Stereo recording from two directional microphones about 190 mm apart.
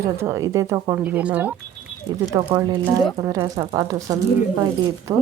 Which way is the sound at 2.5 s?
20° right (ahead or behind).